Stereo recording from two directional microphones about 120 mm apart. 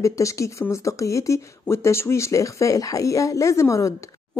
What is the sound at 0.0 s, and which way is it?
Speech, 25° left (ahead or behind).